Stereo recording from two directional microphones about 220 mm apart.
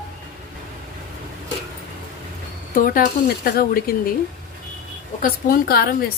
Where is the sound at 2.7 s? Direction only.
40° left (ahead or behind).